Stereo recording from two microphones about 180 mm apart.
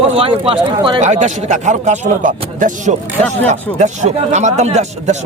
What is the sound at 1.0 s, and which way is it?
A man's voice, 40° right (ahead or behind).